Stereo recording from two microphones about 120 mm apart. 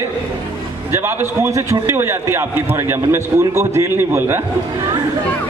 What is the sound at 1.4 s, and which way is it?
A man's voice, 25° right (ahead or behind).